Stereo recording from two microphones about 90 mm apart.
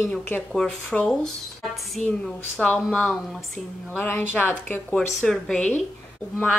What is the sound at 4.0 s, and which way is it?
Speech, 20° left (ahead or behind).